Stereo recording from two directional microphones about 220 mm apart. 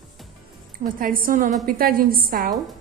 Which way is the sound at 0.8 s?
40° right (ahead or behind).